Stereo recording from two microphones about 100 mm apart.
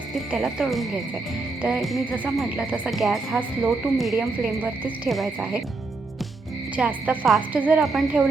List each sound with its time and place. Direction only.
0.3 s speech: 5° right (ahead or behind)
2.0 s speech: 15° right (ahead or behind)
2.9 s speech: centre (ahead or behind)
6.7 s speech: 15° right (ahead or behind)
7.8 s speech: 5° right (ahead or behind)